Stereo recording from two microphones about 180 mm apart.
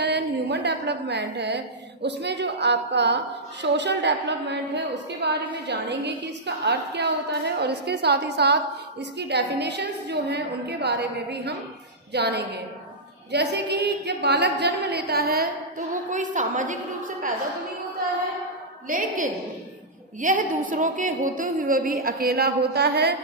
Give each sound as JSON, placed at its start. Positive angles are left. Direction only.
{"t": 0.0, "sound": "a sound", "side_deg": -70}
{"t": 2.0, "sound": "a woman's voice", "side_deg": -70}
{"t": 18.9, "sound": "a woman's voice", "side_deg": -50}